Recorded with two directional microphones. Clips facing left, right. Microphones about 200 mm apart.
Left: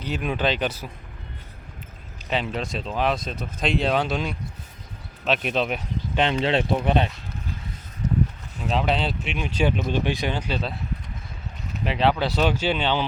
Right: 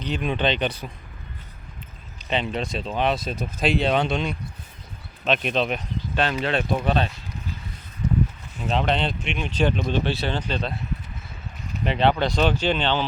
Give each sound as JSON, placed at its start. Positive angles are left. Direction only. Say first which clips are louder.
{"t": 0.0, "sound": "speech", "louder": "right 1 dB", "side_deg": 5}
{"t": 2.3, "sound": "speech", "louder": "right 1 dB", "side_deg": 5}
{"t": 6.1, "sound": "speech", "louder": "left 2 dB", "side_deg": 25}
{"t": 8.0, "sound": "a sound", "louder": "right 1 dB", "side_deg": 40}
{"t": 8.6, "sound": "speech", "louder": "even", "side_deg": 0}
{"t": 11.9, "sound": "speech", "louder": "right 1 dB", "side_deg": 0}